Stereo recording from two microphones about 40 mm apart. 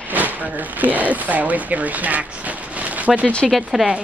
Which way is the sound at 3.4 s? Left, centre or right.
Centre.